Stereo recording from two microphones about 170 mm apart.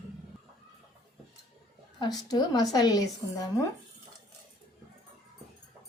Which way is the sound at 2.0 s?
25° left (ahead or behind).